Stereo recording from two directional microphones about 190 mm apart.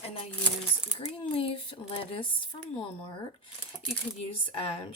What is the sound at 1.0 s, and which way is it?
Speech, 30° left (ahead or behind).